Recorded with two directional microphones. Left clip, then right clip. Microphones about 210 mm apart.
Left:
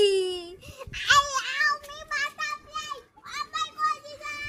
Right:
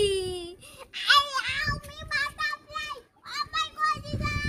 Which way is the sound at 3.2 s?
20° right (ahead or behind).